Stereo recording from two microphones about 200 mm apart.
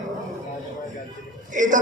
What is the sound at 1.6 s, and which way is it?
Speech, 40° right (ahead or behind).